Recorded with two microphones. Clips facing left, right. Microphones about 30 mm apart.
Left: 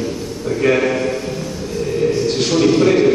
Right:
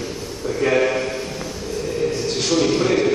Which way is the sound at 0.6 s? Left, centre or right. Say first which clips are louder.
Left 3 dB; centre.